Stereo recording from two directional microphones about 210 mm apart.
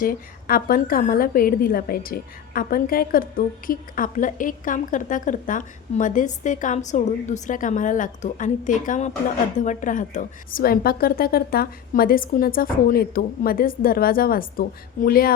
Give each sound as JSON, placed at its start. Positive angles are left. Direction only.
{"t": 0.0, "sound": "a woman's voice", "side_deg": 45}